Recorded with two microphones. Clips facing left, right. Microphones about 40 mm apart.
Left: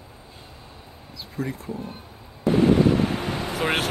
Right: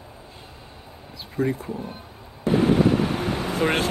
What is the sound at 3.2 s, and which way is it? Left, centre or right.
Vehicle, right.